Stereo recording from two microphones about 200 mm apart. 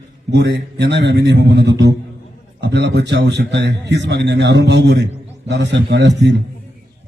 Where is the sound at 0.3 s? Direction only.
60° right (ahead or behind).